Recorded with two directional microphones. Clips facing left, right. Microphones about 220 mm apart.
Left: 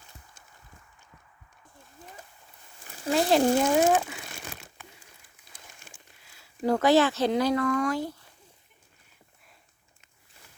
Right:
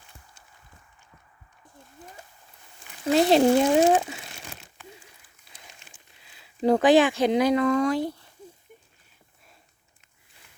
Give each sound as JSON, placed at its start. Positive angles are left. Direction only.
{"t": 3.1, "sound": "speech", "side_deg": -25}
{"t": 6.2, "sound": "speech", "side_deg": -20}